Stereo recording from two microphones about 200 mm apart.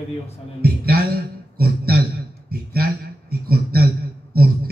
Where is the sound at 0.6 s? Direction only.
50° right (ahead or behind).